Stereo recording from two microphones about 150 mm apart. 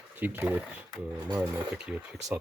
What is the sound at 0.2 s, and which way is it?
Speech, 10° right (ahead or behind).